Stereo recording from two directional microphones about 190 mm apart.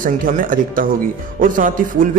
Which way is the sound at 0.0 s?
45° right (ahead or behind).